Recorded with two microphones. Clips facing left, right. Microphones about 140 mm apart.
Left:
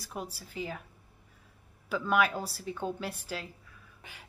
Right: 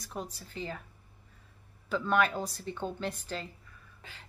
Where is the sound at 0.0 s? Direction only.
5° left (ahead or behind).